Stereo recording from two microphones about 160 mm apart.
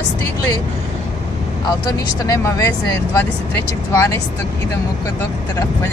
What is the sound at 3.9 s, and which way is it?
Speech, 15° left (ahead or behind).